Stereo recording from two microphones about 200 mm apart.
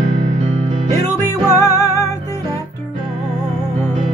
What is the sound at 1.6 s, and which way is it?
Music, 15° left (ahead or behind).